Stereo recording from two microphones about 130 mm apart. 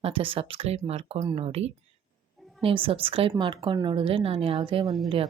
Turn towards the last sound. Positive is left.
turn(degrees=0)  # may be behind; listen again after turning